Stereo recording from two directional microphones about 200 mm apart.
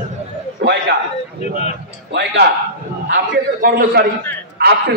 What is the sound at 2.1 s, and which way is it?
A man's voice, 60° right (ahead or behind).